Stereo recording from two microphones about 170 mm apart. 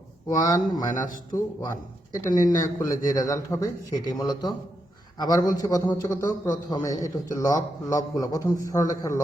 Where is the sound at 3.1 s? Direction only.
20° left (ahead or behind).